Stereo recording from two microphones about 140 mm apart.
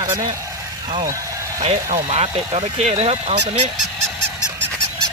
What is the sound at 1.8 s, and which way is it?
Speech, 55° right (ahead or behind).